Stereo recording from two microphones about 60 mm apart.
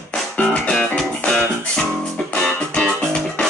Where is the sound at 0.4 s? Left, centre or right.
Left.